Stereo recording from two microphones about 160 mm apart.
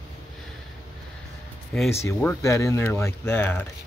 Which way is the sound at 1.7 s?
5° left (ahead or behind).